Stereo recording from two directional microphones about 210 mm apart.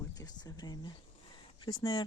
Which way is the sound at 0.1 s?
15° left (ahead or behind).